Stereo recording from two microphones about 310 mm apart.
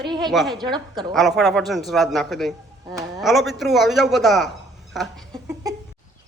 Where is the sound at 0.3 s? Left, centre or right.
Centre.